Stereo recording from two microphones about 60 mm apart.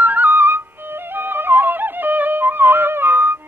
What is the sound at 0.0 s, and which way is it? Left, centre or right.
Flute, right.